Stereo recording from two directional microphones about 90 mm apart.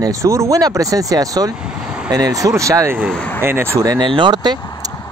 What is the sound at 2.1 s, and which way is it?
Speech, 40° right (ahead or behind).